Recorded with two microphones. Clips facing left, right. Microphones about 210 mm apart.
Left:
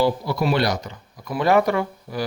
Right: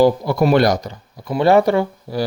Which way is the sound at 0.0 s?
45° right (ahead or behind).